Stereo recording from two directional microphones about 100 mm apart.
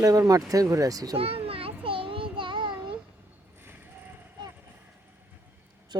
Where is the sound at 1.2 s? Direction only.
75° right (ahead or behind).